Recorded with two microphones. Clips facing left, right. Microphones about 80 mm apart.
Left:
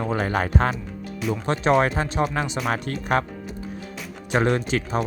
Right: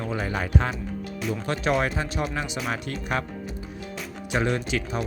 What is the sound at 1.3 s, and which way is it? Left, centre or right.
Speech, left.